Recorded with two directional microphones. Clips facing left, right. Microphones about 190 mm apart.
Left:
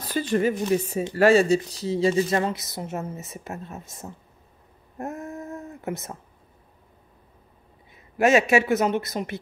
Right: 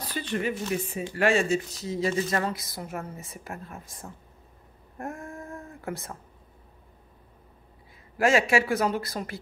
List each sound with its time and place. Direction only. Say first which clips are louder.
0.1 s speech: left 7 dB; 40° left (ahead or behind); by 4.1 s 25° left (ahead or behind)
4.9 s a sound: left 4 dB; 20° left (ahead or behind)
8.2 s speech: left 4 dB; 20° left (ahead or behind)